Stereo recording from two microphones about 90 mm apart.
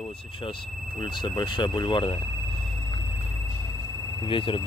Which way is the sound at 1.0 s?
60° left (ahead or behind).